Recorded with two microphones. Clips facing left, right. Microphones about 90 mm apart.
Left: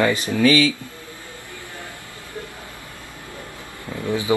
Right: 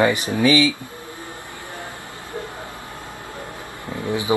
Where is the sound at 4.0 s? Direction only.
20° right (ahead or behind).